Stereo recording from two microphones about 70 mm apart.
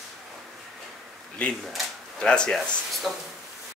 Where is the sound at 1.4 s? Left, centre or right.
Centre.